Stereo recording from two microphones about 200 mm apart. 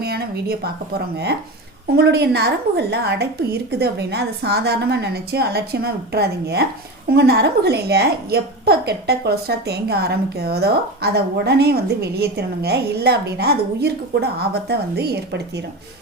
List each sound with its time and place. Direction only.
0.0 s a woman's voice: 50° right (ahead or behind)